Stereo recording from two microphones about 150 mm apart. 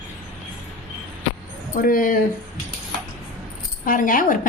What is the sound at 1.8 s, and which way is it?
Speech, 70° left (ahead or behind).